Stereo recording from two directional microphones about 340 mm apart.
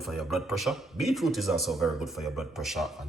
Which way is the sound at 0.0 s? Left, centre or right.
Centre.